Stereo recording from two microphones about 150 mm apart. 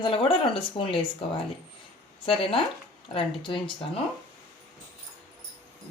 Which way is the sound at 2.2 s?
35° left (ahead or behind).